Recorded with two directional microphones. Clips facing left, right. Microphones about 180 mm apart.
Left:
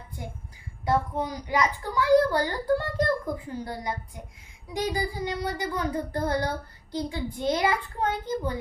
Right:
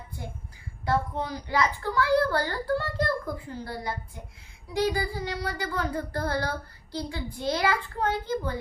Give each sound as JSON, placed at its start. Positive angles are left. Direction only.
{"t": 0.9, "sound": "a child's voice", "side_deg": 15}
{"t": 4.7, "sound": "child singing", "side_deg": 20}